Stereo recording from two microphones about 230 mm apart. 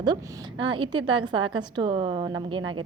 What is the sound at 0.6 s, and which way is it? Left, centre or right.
A woman's voice, right.